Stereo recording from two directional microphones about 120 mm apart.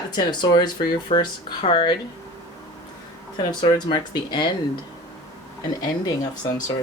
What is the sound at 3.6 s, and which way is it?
Speech, 40° left (ahead or behind).